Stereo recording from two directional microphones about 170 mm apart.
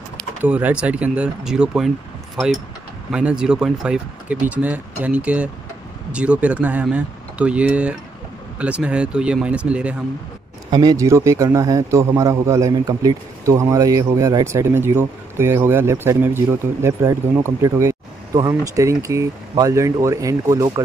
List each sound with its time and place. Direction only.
0.4 s a man's voice: 10° right (ahead or behind)
3.1 s a man's voice: 5° right (ahead or behind)
10.7 s a man's voice: 25° right (ahead or behind)